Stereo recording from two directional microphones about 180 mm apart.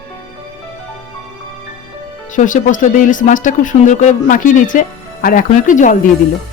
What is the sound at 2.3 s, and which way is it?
Speech, 45° left (ahead or behind).